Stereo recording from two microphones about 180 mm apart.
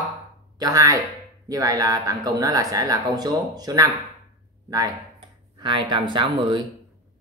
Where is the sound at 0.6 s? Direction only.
20° right (ahead or behind).